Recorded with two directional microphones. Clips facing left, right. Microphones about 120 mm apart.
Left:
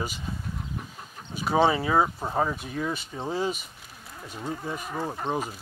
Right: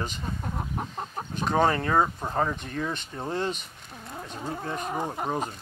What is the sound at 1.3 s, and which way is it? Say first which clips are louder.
Speech: left 1 dB; 5° left (ahead or behind).